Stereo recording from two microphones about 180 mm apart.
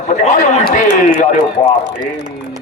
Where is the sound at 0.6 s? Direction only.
55° left (ahead or behind).